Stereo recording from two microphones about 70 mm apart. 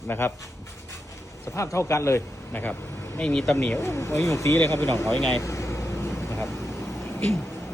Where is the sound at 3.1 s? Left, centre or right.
Centre.